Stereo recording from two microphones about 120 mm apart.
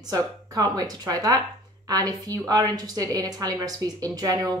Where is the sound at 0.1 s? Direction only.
30° right (ahead or behind).